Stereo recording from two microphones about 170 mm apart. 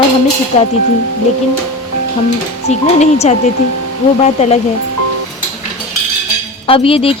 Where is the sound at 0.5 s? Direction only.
35° left (ahead or behind).